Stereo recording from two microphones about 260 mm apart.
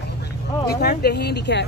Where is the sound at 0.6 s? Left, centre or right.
Left.